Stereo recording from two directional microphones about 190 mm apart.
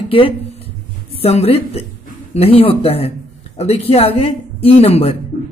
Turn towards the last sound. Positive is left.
turn(degrees=30)  # may be behind; listen again after turning